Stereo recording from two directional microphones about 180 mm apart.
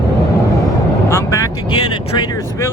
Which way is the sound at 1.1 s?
15° left (ahead or behind).